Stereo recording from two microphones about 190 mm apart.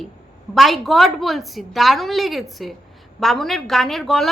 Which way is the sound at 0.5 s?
Centre (ahead or behind).